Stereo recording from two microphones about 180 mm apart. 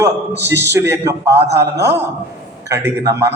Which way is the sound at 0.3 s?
75° right (ahead or behind).